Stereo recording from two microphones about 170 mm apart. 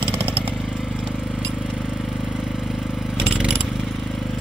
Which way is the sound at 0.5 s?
5° right (ahead or behind).